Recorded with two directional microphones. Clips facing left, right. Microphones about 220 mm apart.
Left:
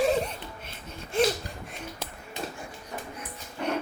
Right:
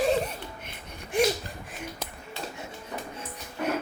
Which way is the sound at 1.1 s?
15° right (ahead or behind).